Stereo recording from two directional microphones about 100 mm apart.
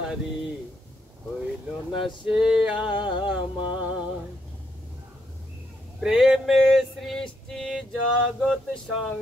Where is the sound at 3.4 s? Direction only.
50° left (ahead or behind).